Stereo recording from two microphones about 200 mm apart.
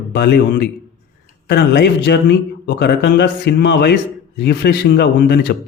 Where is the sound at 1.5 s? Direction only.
55° left (ahead or behind).